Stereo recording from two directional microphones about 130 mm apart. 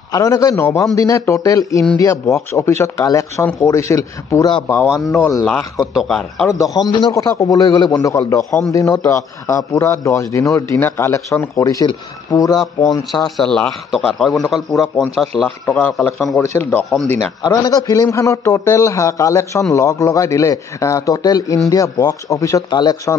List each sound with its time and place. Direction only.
0.1 s speech: 25° left (ahead or behind)
5.4 s speech: centre (ahead or behind)
6.6 s speech: 30° left (ahead or behind)
11.6 s speech: 25° left (ahead or behind)
13.4 s speech: 5° left (ahead or behind)
15.7 s speech: 15° left (ahead or behind)
16.4 s speech: 15° left (ahead or behind)
17.4 s speech: 30° left (ahead or behind)